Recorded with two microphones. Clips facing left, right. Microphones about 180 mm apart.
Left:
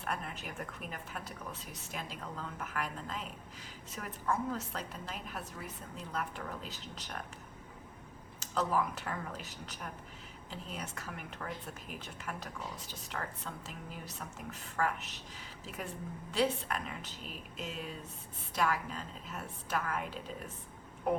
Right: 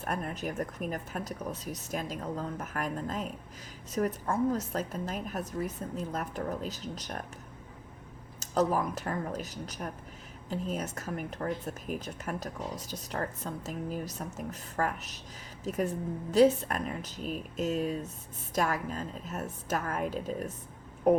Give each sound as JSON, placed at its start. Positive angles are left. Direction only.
{"t": 0.0, "sound": "a woman's voice", "side_deg": -45}
{"t": 8.4, "sound": "a woman's voice", "side_deg": -40}